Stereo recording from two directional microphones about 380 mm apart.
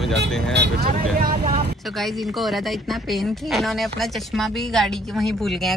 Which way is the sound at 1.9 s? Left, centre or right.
Centre.